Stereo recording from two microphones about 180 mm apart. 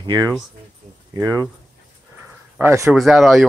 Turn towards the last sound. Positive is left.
turn(degrees=0)  # may be behind; listen again after turning